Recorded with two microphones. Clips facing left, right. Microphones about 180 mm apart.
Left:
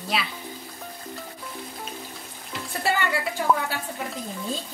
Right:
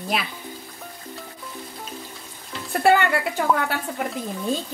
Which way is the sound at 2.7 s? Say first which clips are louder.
Right 8 dB; 55° right (ahead or behind).